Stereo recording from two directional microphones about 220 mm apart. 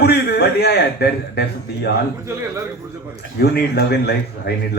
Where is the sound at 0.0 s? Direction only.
45° left (ahead or behind).